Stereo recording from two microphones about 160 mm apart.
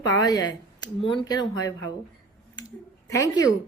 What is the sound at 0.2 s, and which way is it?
Speech, 25° left (ahead or behind).